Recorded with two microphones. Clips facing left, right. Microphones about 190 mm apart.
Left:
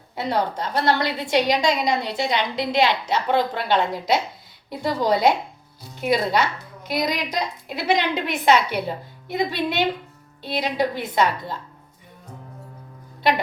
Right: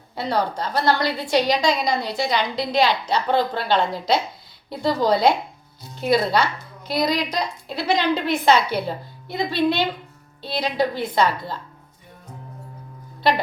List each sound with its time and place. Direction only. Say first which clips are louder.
0.2 s a woman's voice: even; 20° left (ahead or behind)